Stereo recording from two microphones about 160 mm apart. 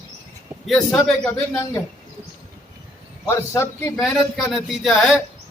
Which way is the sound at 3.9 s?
Centre (ahead or behind).